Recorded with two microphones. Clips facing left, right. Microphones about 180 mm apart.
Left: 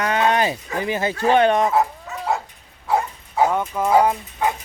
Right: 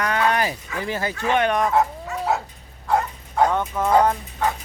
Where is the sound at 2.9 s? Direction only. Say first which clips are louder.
Even; 5° left (ahead or behind).